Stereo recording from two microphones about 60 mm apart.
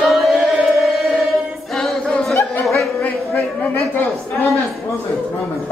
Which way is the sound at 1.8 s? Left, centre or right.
Centre.